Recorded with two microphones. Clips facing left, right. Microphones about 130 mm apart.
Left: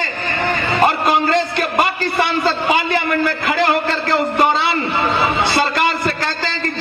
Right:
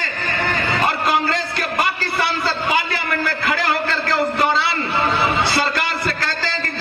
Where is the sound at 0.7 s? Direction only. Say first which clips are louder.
Left 5 dB; 25° left (ahead or behind).